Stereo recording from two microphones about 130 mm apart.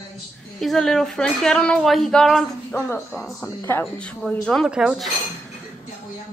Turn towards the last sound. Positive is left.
turn(degrees=-5)  # may be behind; listen again after turning